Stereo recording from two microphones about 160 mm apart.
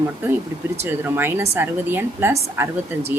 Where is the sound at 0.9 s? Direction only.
15° right (ahead or behind).